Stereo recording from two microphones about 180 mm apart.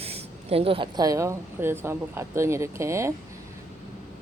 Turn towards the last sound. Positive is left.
turn(degrees=-15)  # may be behind; listen again after turning